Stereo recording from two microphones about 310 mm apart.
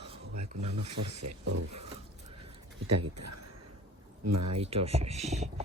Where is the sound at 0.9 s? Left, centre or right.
Right.